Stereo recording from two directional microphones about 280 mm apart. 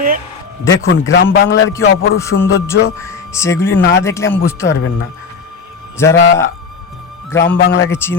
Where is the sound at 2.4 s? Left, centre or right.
Centre.